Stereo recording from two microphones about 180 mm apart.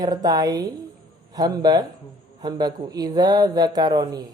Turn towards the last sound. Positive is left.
turn(degrees=-20)  # may be behind; listen again after turning